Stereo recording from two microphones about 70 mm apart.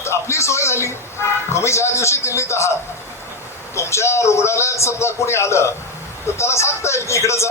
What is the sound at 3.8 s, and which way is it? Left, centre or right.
A man's voice, left.